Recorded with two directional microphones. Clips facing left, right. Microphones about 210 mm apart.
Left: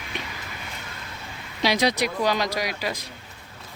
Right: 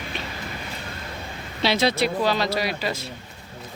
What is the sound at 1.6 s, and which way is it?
Speech, 15° left (ahead or behind).